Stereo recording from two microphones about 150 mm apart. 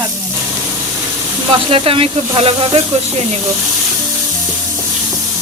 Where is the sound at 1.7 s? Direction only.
40° right (ahead or behind).